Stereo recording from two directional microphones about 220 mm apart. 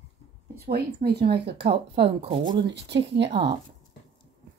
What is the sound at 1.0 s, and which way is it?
Speech, 50° right (ahead or behind).